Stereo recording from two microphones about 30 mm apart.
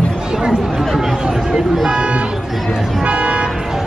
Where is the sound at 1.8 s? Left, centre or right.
Right.